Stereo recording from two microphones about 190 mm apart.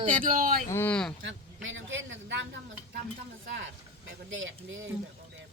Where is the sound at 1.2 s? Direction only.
90° right; by 2.4 s 75° right (ahead or behind).